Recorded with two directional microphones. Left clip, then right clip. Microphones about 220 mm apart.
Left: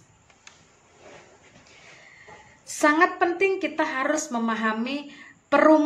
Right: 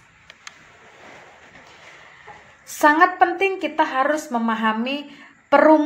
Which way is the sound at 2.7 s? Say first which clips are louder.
Right 5 dB; 5° right (ahead or behind).